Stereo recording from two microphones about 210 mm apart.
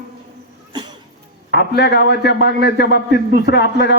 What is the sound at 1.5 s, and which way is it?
A man's voice, 55° left (ahead or behind).